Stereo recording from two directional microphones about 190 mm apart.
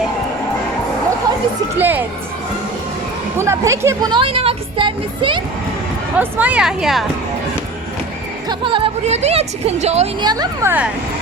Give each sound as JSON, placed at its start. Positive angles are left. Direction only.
{"t": 1.8, "sound": "speech", "side_deg": -10}
{"t": 3.3, "sound": "speech", "side_deg": -15}
{"t": 6.1, "sound": "speech", "side_deg": -10}
{"t": 8.4, "sound": "speech", "side_deg": -25}
{"t": 10.2, "sound": "speech", "side_deg": -20}